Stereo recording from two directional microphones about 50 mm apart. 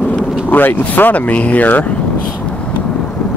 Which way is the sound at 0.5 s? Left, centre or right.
Left.